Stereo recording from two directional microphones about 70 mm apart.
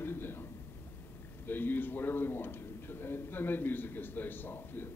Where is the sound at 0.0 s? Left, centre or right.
Left.